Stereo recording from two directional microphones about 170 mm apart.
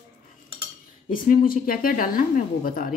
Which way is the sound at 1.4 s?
55° left (ahead or behind).